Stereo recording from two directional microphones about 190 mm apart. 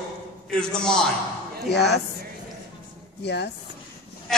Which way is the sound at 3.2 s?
60° left (ahead or behind).